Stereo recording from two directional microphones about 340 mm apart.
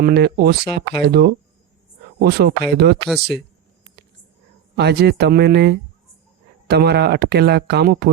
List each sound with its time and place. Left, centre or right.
0.0 s speech: right
3.1 s speech: centre
4.8 s speech: right